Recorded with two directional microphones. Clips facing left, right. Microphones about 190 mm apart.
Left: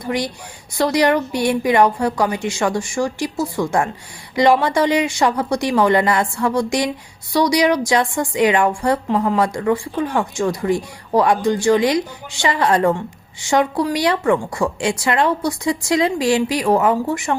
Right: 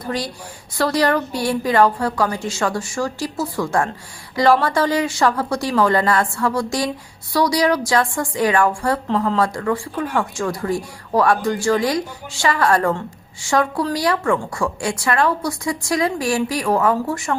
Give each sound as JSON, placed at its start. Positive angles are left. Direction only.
{"t": 0.8, "sound": "a woman's voice", "side_deg": 15}